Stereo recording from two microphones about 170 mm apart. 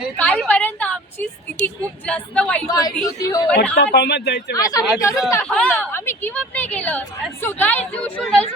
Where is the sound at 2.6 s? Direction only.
20° left (ahead or behind).